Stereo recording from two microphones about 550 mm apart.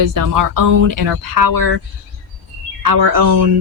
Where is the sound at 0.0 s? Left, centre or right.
Right.